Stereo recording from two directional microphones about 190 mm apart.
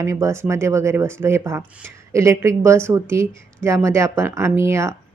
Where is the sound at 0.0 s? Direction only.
15° right (ahead or behind).